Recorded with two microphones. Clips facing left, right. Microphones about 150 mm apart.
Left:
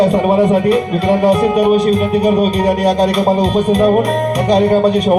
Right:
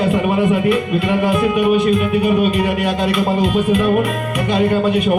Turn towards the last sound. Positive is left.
turn(degrees=35)  # may be behind; listen again after turning